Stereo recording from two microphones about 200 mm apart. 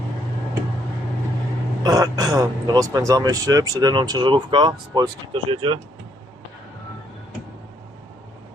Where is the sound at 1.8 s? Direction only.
20° right (ahead or behind).